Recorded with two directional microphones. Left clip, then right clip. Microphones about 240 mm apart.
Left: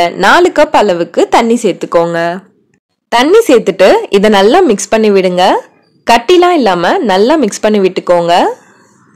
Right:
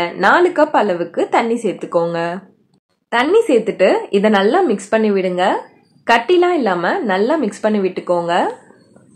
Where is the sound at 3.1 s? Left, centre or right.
Left.